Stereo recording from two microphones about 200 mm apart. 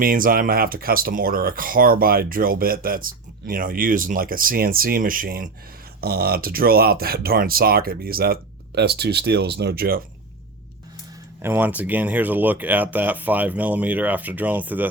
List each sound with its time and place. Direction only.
0.0 s speech: 45° right (ahead or behind)
11.4 s speech: 10° right (ahead or behind)